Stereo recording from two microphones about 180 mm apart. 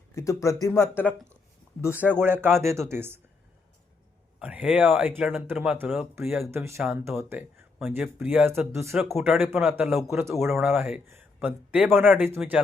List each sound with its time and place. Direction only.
0.1 s speech: 15° left (ahead or behind)
2.0 s speech: 10° right (ahead or behind)
4.4 s speech: 5° right (ahead or behind)
9.0 s a man's voice: centre (ahead or behind)
9.2 s a man's voice: 10° right (ahead or behind)
10.1 s speech: 15° right (ahead or behind)
10.4 s a man's voice: centre (ahead or behind)